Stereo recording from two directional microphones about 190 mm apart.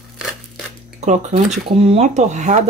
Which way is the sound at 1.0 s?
40° right (ahead or behind).